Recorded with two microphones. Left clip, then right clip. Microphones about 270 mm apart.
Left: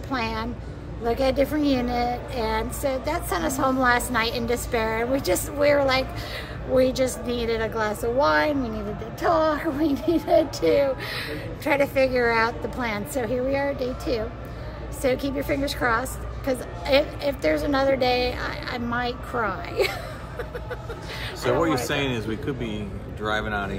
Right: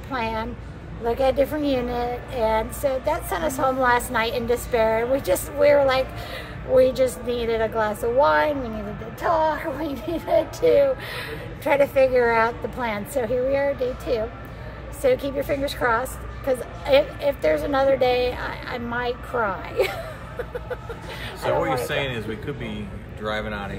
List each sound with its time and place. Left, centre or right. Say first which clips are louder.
0.1 s a woman's voice: right 1 dB; centre
21.8 s a man's voice: even; centre